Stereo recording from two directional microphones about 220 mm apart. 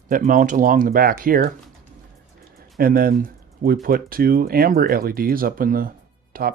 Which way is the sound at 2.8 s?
40° right (ahead or behind).